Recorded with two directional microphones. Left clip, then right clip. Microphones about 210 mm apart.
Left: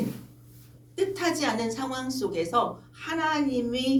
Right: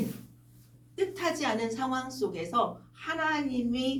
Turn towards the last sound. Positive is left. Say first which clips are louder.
# left 4 dB
turn(degrees=35)  # may be behind; listen again after turning